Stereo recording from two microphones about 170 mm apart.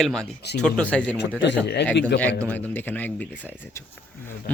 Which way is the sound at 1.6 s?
80° left.